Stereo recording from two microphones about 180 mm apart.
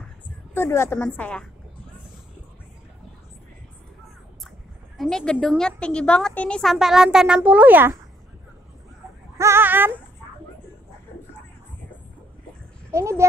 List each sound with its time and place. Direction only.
0.6 s a woman's voice: 15° left (ahead or behind)
4.9 s a woman's voice: centre (ahead or behind)
9.4 s speech: 15° right (ahead or behind)
12.9 s speech: 15° right (ahead or behind)